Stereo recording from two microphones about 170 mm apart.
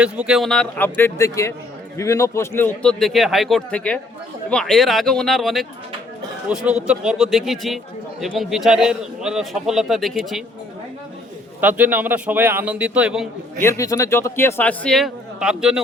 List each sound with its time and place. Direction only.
0.0 s a man's voice: 5° right (ahead or behind); by 2.9 s 10° left (ahead or behind)
3.0 s a man's voice: centre (ahead or behind)
11.6 s a man's voice: 10° right (ahead or behind)
13.6 s a man's voice: 15° left (ahead or behind); by 15.8 s 5° right (ahead or behind)